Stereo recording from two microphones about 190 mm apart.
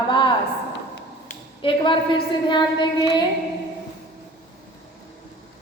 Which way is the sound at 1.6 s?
25° left (ahead or behind).